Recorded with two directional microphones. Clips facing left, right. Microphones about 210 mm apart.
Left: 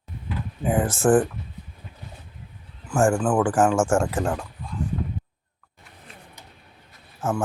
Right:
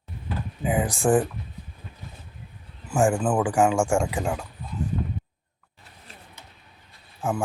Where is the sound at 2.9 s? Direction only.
Centre (ahead or behind).